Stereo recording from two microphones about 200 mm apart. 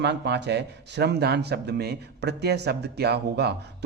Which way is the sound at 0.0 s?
60° right (ahead or behind).